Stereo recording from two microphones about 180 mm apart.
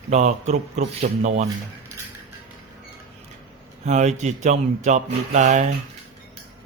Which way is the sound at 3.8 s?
40° right (ahead or behind).